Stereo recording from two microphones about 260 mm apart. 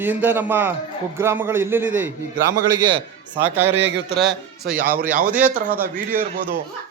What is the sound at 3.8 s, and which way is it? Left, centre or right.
Speech, right.